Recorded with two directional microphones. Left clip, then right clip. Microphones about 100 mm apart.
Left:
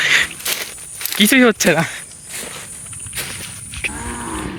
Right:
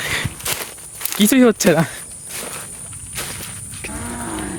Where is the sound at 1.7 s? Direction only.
70° right (ahead or behind).